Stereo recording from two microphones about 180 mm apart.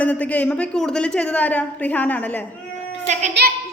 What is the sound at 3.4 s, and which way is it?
Speech, 70° right (ahead or behind).